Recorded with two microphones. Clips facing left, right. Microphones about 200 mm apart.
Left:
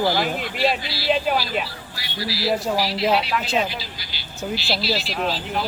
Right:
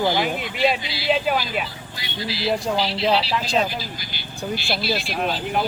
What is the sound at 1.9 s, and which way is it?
Speech, 20° right (ahead or behind).